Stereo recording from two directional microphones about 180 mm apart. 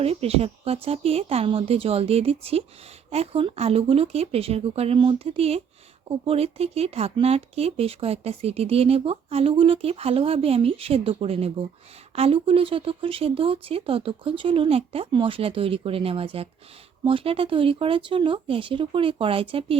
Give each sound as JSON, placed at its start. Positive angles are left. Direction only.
{"t": 0.0, "sound": "speech", "side_deg": -35}